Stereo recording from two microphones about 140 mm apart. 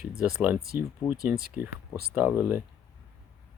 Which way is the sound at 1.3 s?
10° right (ahead or behind).